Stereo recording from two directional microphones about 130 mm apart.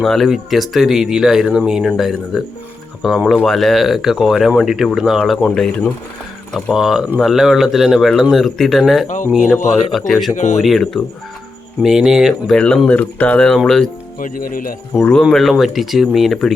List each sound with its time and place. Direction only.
0.0 s speech: centre (ahead or behind)
9.0 s speech: 75° left (ahead or behind)
10.1 s speech: centre (ahead or behind)
10.3 s speech: 65° left (ahead or behind)
10.6 s speech: centre (ahead or behind)
14.2 s speech: 90° left
15.1 s speech: 5° left (ahead or behind)